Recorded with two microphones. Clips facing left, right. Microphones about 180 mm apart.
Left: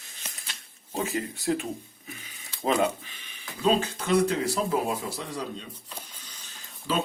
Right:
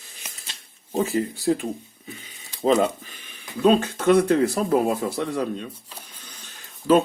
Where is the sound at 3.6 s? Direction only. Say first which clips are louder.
Right 7 dB; 55° right (ahead or behind).